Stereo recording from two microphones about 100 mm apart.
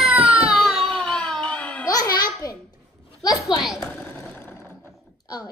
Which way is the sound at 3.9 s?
15° left (ahead or behind).